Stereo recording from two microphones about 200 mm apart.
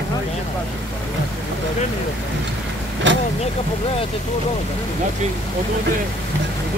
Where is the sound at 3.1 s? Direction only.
65° right (ahead or behind).